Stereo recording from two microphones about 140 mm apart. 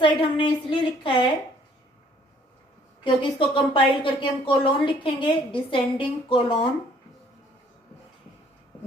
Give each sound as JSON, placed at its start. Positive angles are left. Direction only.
{"t": 0.0, "sound": "a woman's voice", "side_deg": 35}
{"t": 3.0, "sound": "a woman's voice", "side_deg": 40}